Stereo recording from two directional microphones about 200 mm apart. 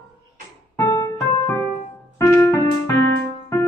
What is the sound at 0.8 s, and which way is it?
Keyboard, 15° left (ahead or behind).